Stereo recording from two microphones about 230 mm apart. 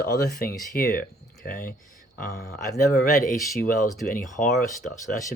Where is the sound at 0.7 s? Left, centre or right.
Left.